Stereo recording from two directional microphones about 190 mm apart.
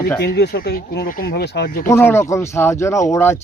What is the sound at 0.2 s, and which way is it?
Speech, 60° left (ahead or behind).